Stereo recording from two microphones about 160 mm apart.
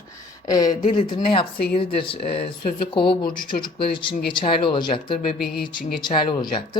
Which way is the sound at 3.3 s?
60° left (ahead or behind).